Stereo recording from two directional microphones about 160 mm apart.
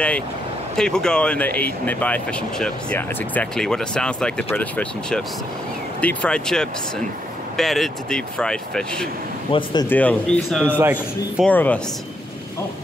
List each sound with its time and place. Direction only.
0.7 s speech: 5° left (ahead or behind)
9.5 s speech: 30° left (ahead or behind)
9.8 s speech: 10° left (ahead or behind)
10.8 s speech: 10° right (ahead or behind)
11.4 s speech: 10° left (ahead or behind)